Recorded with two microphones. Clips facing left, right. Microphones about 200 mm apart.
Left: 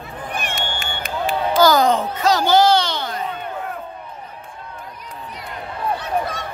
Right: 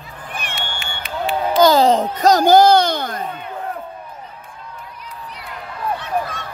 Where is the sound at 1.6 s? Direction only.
25° right (ahead or behind); by 3.2 s 50° right (ahead or behind).